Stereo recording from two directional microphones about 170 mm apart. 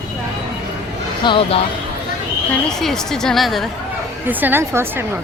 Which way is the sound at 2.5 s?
5° left (ahead or behind).